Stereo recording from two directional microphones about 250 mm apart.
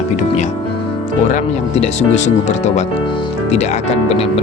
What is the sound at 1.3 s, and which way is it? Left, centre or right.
Speech, left.